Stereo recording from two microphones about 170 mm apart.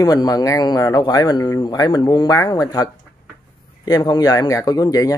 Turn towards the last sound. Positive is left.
turn(degrees=20)  # may be behind; listen again after turning